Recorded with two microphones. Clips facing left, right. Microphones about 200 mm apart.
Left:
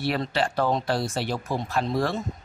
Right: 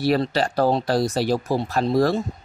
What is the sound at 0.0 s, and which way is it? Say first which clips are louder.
Speech: right 5 dB; 40° right (ahead or behind).